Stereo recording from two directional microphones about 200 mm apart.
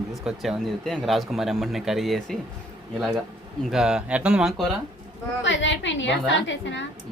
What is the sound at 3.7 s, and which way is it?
Speech, centre (ahead or behind).